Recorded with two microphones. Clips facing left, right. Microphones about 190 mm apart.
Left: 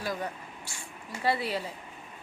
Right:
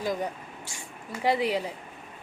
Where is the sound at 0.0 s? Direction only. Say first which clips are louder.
Right 4 dB; 20° right (ahead or behind).